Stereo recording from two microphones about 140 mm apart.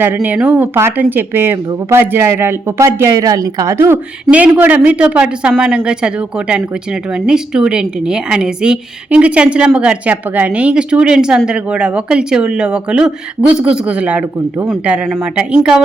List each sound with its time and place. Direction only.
0.0 s a woman's voice: 15° right (ahead or behind)
7.3 s a woman's voice: 5° right (ahead or behind)